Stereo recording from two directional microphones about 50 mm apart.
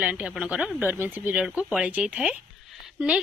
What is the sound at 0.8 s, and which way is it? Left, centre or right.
Speech, right.